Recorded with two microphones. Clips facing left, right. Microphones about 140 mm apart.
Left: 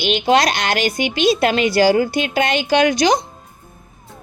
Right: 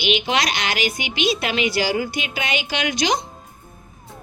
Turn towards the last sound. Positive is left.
turn(degrees=40)  # may be behind; listen again after turning